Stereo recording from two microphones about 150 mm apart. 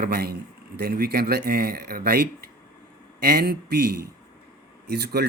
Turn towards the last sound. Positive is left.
turn(degrees=-90)